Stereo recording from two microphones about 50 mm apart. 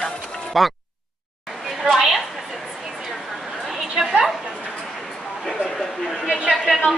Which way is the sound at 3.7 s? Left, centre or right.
Centre.